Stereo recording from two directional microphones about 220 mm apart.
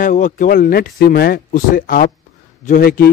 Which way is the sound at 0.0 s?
35° left (ahead or behind).